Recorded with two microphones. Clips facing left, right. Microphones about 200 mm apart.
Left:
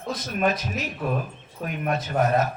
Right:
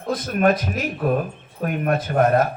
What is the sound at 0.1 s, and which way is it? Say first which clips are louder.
Speech: right 6 dB; 55° right (ahead or behind).